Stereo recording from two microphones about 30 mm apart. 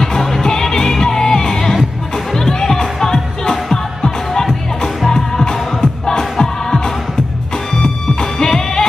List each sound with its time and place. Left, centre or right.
0.0 s music: centre
8.2 s music: centre